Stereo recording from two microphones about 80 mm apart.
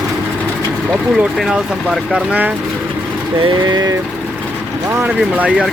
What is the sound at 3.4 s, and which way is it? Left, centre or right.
Speech, right.